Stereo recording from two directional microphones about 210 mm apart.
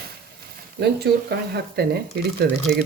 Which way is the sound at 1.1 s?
50° right (ahead or behind).